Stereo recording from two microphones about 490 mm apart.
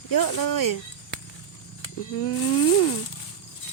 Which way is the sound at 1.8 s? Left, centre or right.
Left.